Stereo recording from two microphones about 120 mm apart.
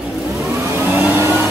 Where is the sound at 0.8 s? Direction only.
15° right (ahead or behind).